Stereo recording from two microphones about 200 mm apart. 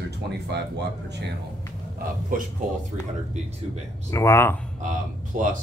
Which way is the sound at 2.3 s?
40° right (ahead or behind).